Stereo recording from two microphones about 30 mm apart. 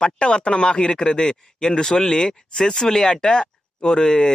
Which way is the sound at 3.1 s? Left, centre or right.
Left.